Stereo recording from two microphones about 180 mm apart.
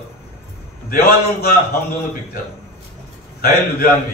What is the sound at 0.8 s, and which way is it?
Mantra, 55° left (ahead or behind).